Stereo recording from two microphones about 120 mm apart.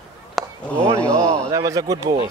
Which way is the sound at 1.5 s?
30° right (ahead or behind).